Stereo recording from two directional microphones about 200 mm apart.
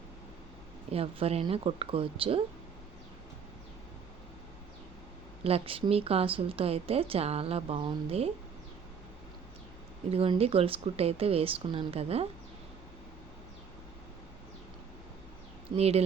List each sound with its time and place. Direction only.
0.9 s speech: 30° right (ahead or behind)
5.4 s speech: 30° right (ahead or behind)
10.1 s speech: 30° right (ahead or behind)
15.7 s speech: 30° right (ahead or behind)